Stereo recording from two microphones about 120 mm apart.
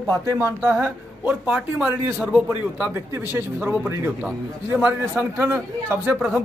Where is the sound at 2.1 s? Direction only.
20° right (ahead or behind).